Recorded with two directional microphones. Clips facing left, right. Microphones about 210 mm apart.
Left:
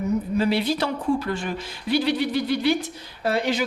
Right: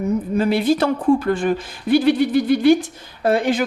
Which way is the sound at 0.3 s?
50° right (ahead or behind).